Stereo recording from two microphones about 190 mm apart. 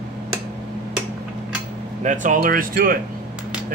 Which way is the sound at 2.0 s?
40° right (ahead or behind).